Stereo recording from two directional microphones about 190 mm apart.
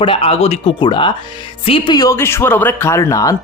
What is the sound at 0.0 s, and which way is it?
Speech, 30° left (ahead or behind).